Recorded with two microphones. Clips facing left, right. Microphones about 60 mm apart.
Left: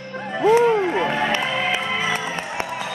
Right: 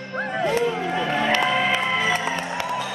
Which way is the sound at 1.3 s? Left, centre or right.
Centre.